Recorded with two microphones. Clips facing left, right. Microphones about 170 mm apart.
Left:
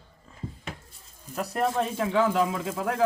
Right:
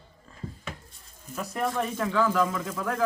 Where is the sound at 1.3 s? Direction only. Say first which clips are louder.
Left 3 dB; 35° left (ahead or behind).